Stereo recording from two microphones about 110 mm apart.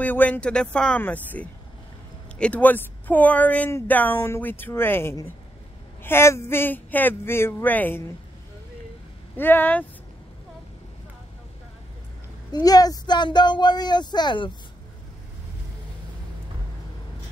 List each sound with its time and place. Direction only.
0.0 s speech: 15° left (ahead or behind)
9.4 s speech: 20° left (ahead or behind)
12.5 s speech: 35° left (ahead or behind)